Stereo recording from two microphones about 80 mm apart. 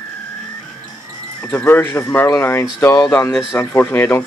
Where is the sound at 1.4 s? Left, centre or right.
Left.